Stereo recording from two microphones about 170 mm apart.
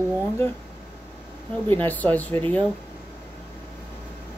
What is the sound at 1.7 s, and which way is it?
Speech, 10° left (ahead or behind).